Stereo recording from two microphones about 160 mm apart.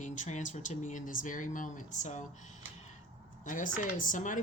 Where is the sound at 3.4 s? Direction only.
55° left (ahead or behind).